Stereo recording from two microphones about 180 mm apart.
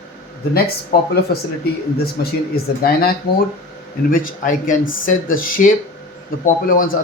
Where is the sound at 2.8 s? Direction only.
55° left (ahead or behind).